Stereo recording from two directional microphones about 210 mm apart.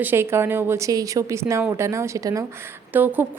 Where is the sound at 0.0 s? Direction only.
10° right (ahead or behind).